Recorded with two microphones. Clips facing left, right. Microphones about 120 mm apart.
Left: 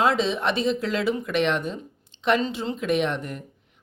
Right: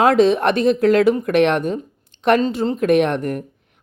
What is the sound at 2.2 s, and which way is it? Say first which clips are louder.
Mantra: right 7 dB; 45° right (ahead or behind).